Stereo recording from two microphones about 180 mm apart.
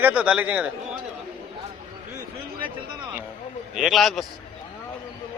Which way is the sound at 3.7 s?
Centre (ahead or behind).